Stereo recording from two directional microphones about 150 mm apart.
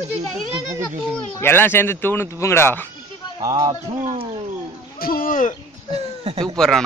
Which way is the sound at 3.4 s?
25° right (ahead or behind).